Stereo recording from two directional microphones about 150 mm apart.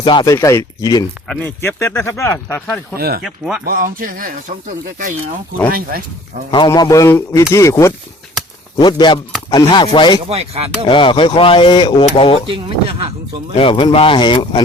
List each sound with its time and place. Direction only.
0.0 s speech: 30° left (ahead or behind)
0.3 s speech: 20° left (ahead or behind)
1.3 s speech: 10° left (ahead or behind)
3.0 s speech: 90° right
3.2 s speech: 5° right (ahead or behind)
3.6 s speech: 75° right (ahead or behind)
5.7 s speech: 80° right
6.7 s speech: 25° left (ahead or behind)
10.2 s speech: 45° right (ahead or behind)
10.8 s speech: 35° left (ahead or behind)
12.5 s speech: 35° right (ahead or behind)
13.6 s speech: 35° left (ahead or behind)